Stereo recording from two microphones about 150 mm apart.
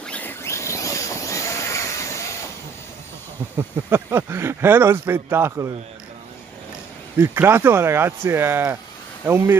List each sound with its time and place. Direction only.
0.0 s a sound: 10° left (ahead or behind)
3.5 s speech: 15° right (ahead or behind)
7.2 s speech: 15° right (ahead or behind)